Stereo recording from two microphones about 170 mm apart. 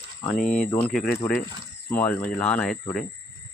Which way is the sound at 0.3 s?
50° left (ahead or behind).